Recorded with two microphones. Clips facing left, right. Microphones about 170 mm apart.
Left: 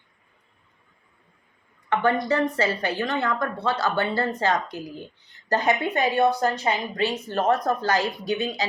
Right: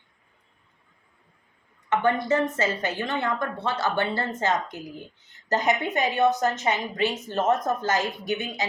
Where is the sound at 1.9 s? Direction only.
20° right (ahead or behind).